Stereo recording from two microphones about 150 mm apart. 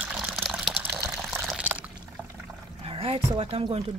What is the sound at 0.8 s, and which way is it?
Water, 15° right (ahead or behind).